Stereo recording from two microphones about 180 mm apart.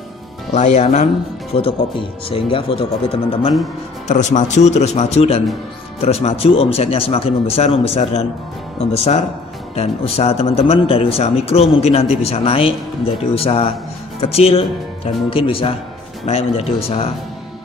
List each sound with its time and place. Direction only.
0.6 s speech: 40° left (ahead or behind)
1.5 s speech: 30° left (ahead or behind)
4.1 s speech: 40° left (ahead or behind)